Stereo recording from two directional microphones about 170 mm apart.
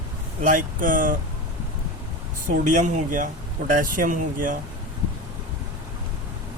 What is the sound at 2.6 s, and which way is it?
Speech, 45° right (ahead or behind).